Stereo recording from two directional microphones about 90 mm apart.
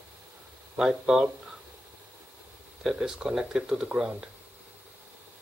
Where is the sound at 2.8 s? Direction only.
10° right (ahead or behind).